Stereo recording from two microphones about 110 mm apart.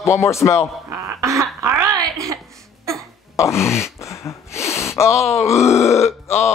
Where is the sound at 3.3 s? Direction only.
25° left (ahead or behind).